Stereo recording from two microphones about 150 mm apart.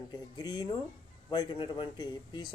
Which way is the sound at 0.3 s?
25° left (ahead or behind).